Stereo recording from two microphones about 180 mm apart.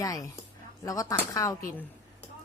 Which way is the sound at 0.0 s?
20° left (ahead or behind).